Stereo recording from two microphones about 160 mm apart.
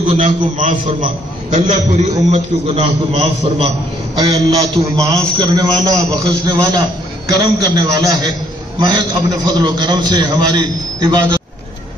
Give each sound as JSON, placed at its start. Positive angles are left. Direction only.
{"t": 0.1, "sound": "a man's voice", "side_deg": -50}
{"t": 4.2, "sound": "a man's voice", "side_deg": -25}